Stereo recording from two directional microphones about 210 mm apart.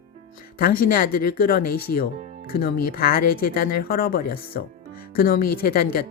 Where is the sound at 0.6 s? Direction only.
45° left (ahead or behind).